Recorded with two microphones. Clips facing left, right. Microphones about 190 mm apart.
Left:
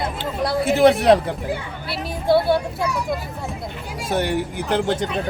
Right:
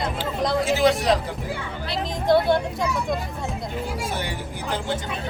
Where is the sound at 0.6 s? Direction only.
55° left (ahead or behind).